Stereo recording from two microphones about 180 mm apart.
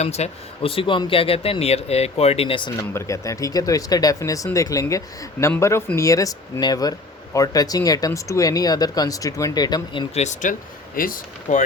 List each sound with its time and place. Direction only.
0.0 s speech: 35° left (ahead or behind)
2.9 s speech: 15° left (ahead or behind)
10.2 s speech: 40° left (ahead or behind)
10.9 s speech: 50° left (ahead or behind)